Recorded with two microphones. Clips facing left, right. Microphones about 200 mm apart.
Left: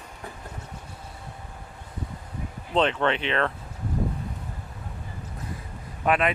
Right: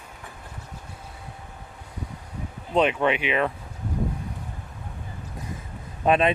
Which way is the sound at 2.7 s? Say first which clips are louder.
Right 2 dB; 10° right (ahead or behind).